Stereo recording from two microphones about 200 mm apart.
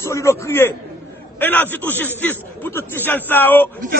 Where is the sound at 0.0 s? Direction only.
15° left (ahead or behind).